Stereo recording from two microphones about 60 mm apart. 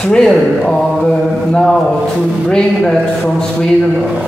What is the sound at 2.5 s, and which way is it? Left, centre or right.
A man's voice, centre.